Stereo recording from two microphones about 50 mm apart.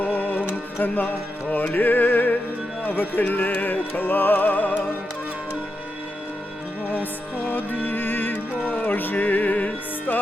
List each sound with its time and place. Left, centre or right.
0.0 s music: left
6.9 s music: left